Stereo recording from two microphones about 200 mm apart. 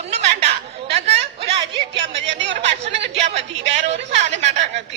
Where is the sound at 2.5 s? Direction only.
30° right (ahead or behind).